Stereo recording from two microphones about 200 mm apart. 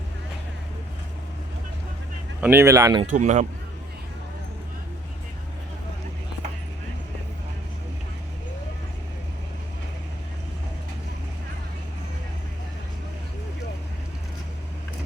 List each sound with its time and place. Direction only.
2.4 s speech: 10° right (ahead or behind)
3.1 s speech: 40° right (ahead or behind)